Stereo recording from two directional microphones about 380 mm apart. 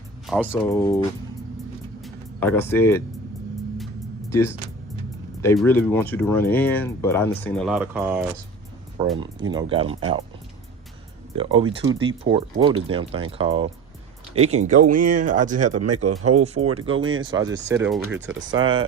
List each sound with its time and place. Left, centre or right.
0.3 s speech: centre
2.0 s music: centre
4.3 s speech: centre
11.3 s speech: centre
15.7 s speech: right
17.2 s speech: centre